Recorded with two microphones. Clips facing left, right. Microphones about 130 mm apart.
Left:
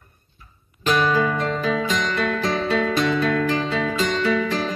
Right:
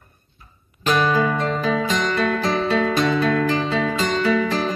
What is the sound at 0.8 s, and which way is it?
Music, 40° right (ahead or behind).